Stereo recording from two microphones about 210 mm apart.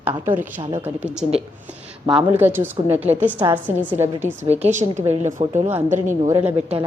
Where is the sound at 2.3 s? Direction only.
10° right (ahead or behind).